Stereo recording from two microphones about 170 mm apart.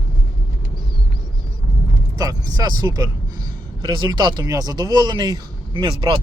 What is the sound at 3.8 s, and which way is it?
Speech, 25° right (ahead or behind).